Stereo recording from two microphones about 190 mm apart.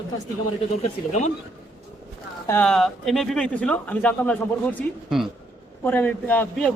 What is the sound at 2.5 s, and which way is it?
Speech, 5° left (ahead or behind).